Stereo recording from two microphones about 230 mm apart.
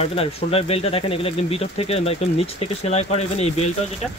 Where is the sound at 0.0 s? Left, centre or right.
Left.